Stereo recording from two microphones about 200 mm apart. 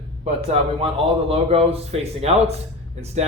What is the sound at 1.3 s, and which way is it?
Speech, 30° right (ahead or behind).